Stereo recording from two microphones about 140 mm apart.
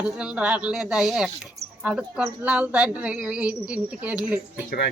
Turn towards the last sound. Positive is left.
turn(degrees=-10)  # may be behind; listen again after turning